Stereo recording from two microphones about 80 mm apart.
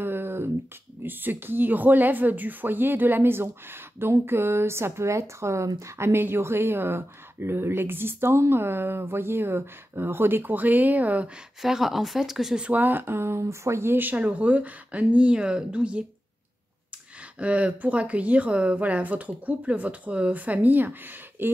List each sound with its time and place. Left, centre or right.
0.0 s a sound: right
1.0 s speech: right
11.6 s speech: centre
17.4 s speech: centre